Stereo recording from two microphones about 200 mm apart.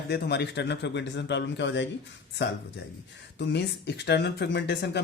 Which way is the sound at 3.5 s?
60° left (ahead or behind).